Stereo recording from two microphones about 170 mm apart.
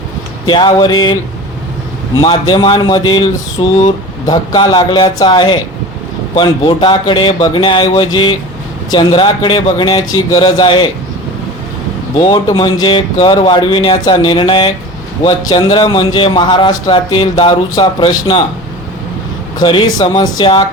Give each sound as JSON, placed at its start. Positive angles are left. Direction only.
{"t": 0.4, "sound": "a man's voice", "side_deg": 25}
{"t": 2.2, "sound": "a man's voice", "side_deg": 25}
{"t": 12.1, "sound": "a man's voice", "side_deg": 30}
{"t": 19.5, "sound": "a man's voice", "side_deg": 25}